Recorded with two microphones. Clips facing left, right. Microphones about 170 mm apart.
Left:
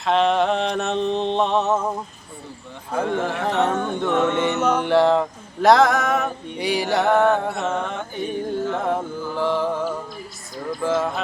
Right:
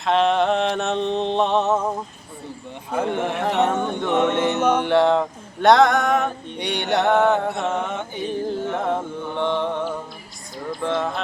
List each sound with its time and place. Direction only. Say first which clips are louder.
0.0 s a sound: even; centre (ahead or behind)
2.9 s music: even; 10° right (ahead or behind)
4.4 s music: right 1 dB; centre (ahead or behind)
7.1 s music: even; 20° right (ahead or behind)
7.3 s a sound: right 1 dB; centre (ahead or behind)
8.2 s music: left 1 dB; centre (ahead or behind)
8.7 s carnatic music: even; centre (ahead or behind)
9.3 s music: left 1 dB; 5° left (ahead or behind)
10.8 s a sound: left 2 dB; 5° left (ahead or behind)